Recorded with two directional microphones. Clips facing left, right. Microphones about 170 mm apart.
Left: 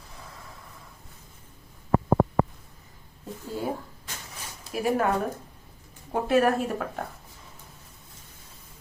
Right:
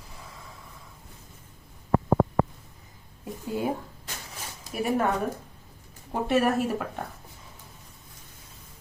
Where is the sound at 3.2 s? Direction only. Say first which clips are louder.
Right 3 dB; 15° right (ahead or behind).